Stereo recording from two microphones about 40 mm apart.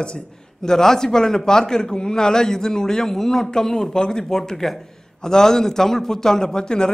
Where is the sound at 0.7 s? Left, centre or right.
Centre.